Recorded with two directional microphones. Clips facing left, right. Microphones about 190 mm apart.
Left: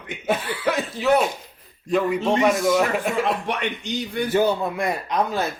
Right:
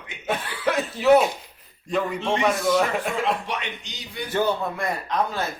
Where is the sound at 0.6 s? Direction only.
Centre (ahead or behind).